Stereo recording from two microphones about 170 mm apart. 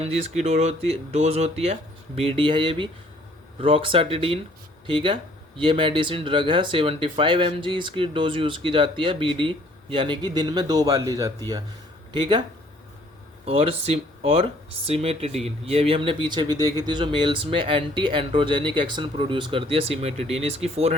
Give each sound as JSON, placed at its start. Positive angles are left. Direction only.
{"t": 0.0, "sound": "speech", "side_deg": -40}